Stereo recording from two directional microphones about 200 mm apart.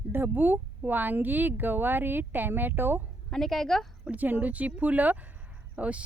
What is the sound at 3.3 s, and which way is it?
A woman's voice, centre (ahead or behind).